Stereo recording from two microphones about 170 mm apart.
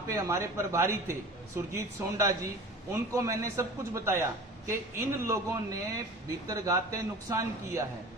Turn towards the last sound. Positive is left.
turn(degrees=-20)  # may be behind; listen again after turning